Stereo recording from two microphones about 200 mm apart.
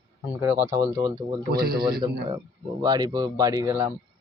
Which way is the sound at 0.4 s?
15° right (ahead or behind).